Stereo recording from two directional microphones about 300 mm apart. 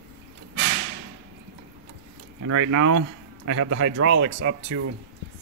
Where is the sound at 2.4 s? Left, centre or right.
Right.